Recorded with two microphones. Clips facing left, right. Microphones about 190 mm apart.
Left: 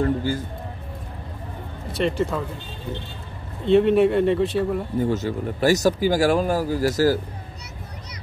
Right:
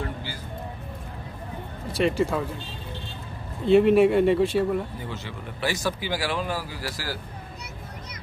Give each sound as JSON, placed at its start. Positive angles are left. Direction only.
{"t": 0.0, "sound": "music", "side_deg": 45}
{"t": 1.9, "sound": "speech", "side_deg": 0}
{"t": 3.6, "sound": "speech", "side_deg": 0}
{"t": 5.0, "sound": "speech", "side_deg": 45}